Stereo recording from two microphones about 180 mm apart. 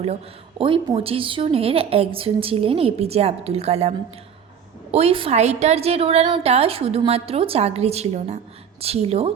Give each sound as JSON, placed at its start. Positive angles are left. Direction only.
{"t": 0.6, "sound": "a woman's voice", "side_deg": -30}